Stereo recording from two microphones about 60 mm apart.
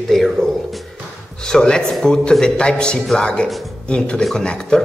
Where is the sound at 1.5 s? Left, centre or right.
Centre.